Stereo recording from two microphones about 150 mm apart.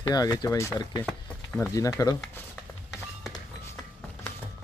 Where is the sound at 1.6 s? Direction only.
20° left (ahead or behind).